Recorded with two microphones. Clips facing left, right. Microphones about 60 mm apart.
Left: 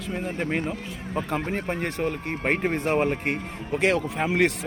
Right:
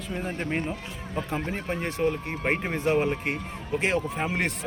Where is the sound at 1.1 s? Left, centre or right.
Left.